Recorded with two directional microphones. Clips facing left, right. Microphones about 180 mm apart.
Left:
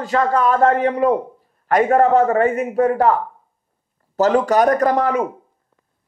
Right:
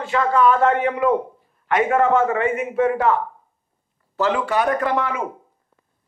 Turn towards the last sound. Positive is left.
turn(degrees=40)  # may be behind; listen again after turning